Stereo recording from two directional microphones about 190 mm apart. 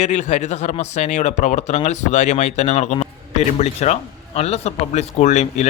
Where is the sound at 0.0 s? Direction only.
35° left (ahead or behind).